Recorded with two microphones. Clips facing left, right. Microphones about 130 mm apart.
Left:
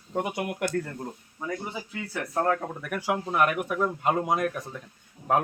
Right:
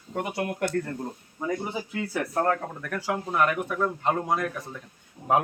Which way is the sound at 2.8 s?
15° left (ahead or behind).